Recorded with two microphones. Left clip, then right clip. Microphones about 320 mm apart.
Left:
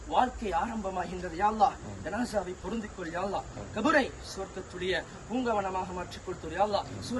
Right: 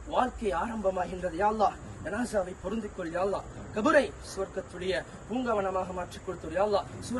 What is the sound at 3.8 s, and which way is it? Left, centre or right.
Speech, centre.